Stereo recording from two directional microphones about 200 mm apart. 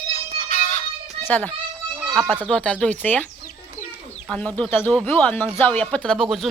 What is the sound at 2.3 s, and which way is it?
Speech, 5° left (ahead or behind).